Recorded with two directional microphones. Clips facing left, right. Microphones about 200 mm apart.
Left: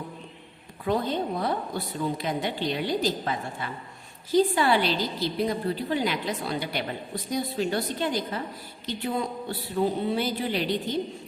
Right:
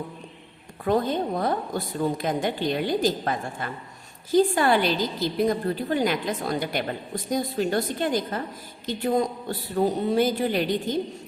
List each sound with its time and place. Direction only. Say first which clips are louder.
0.9 s a woman's voice: right 3 dB; 50° right (ahead or behind)